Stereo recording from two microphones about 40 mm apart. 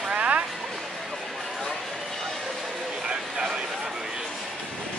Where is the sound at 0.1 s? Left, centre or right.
Right.